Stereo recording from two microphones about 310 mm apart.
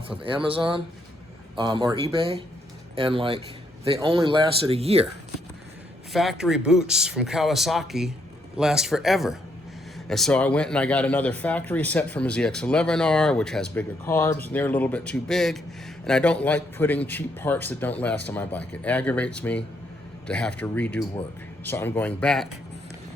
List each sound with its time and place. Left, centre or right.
0.4 s speech: centre
6.1 s a man's voice: centre